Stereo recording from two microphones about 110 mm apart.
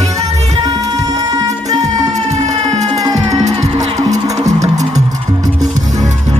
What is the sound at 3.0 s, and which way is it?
Music, 35° right (ahead or behind).